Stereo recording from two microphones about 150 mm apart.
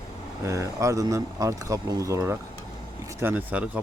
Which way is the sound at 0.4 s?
20° right (ahead or behind).